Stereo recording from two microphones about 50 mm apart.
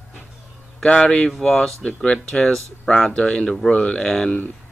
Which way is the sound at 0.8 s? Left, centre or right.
Centre.